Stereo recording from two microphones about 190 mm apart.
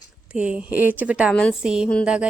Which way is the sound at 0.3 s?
5° right (ahead or behind).